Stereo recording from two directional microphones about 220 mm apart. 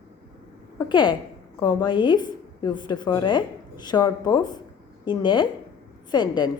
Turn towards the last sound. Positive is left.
turn(degrees=20)  # may be behind; listen again after turning